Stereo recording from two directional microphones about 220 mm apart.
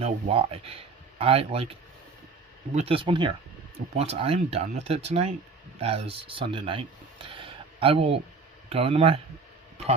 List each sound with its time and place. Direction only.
0.0 s speech: 25° right (ahead or behind)
2.7 s speech: 25° right (ahead or behind)